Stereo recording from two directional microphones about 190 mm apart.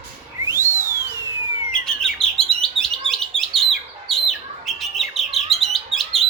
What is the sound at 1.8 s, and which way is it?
Chirp, 5° left (ahead or behind).